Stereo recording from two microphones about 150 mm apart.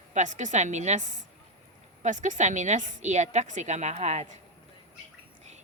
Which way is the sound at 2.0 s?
55° right (ahead or behind).